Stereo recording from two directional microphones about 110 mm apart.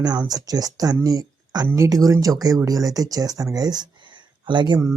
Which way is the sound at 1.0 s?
35° right (ahead or behind).